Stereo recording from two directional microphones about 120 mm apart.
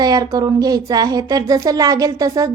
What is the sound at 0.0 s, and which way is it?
Speech, 30° right (ahead or behind).